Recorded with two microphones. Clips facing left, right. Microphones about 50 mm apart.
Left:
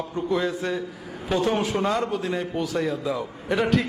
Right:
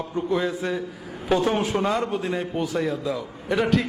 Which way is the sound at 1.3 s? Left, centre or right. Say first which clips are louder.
Right 1 dB; right.